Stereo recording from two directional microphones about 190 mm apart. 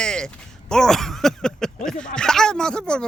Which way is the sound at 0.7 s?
Centre (ahead or behind).